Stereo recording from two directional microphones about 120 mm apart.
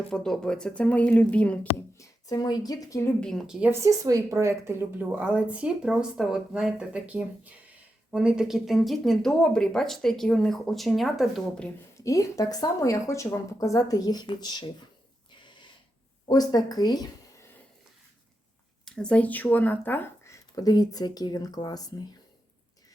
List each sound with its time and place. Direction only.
0.1 s speech: 5° left (ahead or behind)
2.0 s speech: 30° left (ahead or behind)
3.2 s speech: 5° left (ahead or behind)
3.4 s a woman's voice: 5° right (ahead or behind)
3.7 s a woman's voice: 25° right (ahead or behind); by 11.7 s 5° left (ahead or behind)
11.9 s speech: 25° left (ahead or behind)
16.2 s speech: 35° left (ahead or behind)
18.9 s speech: 5° left (ahead or behind); by 21.9 s 30° left (ahead or behind)